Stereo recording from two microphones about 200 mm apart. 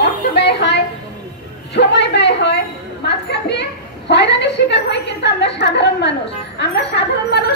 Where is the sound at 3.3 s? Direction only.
60° left (ahead or behind).